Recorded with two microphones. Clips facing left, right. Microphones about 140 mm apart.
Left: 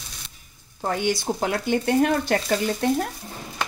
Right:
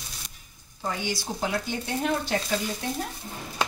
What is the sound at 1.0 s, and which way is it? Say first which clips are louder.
Speech: left 7 dB; 55° left (ahead or behind).